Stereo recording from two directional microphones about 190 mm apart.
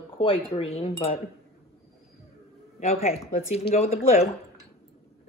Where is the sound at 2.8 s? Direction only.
35° left (ahead or behind).